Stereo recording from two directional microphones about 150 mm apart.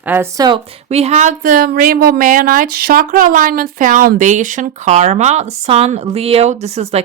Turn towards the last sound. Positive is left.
turn(degrees=-45)  # may be behind; listen again after turning